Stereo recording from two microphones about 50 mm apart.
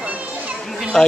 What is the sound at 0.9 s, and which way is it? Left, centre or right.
Speech, centre.